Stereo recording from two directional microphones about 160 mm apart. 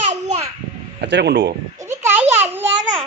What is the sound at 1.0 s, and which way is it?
Speech, 90° right.